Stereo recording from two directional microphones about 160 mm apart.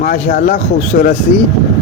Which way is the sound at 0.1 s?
65° left (ahead or behind).